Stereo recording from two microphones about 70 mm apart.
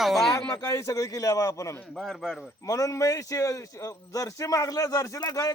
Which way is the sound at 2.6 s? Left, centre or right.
Left.